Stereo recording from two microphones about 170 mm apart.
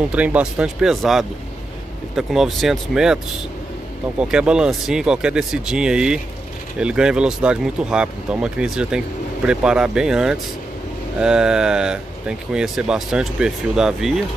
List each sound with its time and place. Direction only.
0.1 s speech: 5° right (ahead or behind)
4.2 s speech: 5° right (ahead or behind)